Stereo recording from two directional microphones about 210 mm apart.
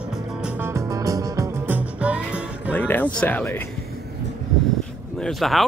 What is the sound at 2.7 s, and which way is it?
Speech, 10° left (ahead or behind).